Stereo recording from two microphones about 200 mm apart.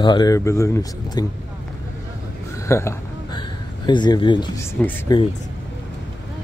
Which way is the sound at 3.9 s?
25° left (ahead or behind).